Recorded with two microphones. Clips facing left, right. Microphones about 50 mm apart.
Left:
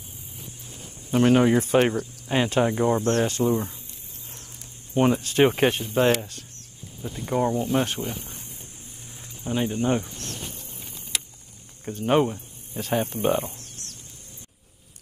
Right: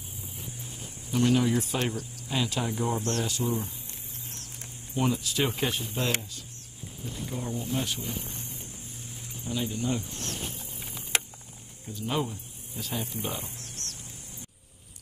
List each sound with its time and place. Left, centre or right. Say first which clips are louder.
1.1 s speech: left 6 dB; left
3.0 s speech: left 8 dB; centre
3.3 s speech: left 7 dB; left
4.9 s speech: left 8 dB; left
7.2 s speech: left 11 dB; left
9.4 s speech: left 6 dB; left
11.1 s a sound: right 3 dB; right
11.8 s speech: left 10 dB; left
13.6 s a sound: right 1 dB; centre